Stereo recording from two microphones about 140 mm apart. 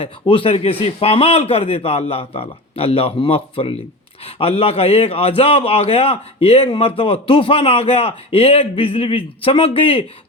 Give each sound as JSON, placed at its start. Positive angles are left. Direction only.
{"t": 0.0, "sound": "a man's voice", "side_deg": 40}